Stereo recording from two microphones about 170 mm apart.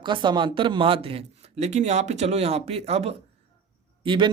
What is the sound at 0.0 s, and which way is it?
A man's voice, 25° right (ahead or behind).